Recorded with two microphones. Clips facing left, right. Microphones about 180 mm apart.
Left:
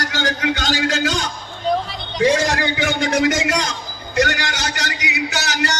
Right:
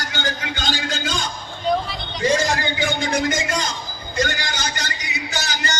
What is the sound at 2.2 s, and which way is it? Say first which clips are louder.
A man's voice: left 3 dB; 70° left (ahead or behind).